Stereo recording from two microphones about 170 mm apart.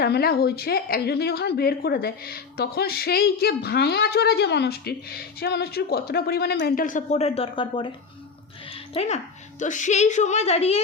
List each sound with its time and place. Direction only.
0.0 s a woman's voice: 65° left (ahead or behind); by 10.8 s 40° left (ahead or behind)